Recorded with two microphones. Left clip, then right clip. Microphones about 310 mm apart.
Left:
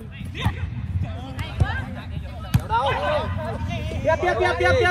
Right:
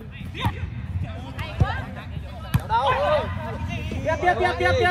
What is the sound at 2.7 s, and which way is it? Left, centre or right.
Basketball bounce, right.